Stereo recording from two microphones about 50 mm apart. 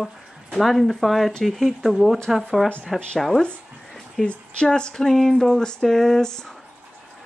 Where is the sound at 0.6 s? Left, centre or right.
Centre.